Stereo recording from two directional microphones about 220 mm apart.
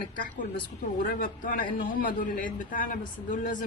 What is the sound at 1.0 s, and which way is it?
Speech, 40° left (ahead or behind).